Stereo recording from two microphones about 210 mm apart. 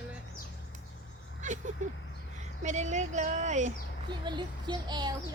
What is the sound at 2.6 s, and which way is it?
Speech, 35° right (ahead or behind).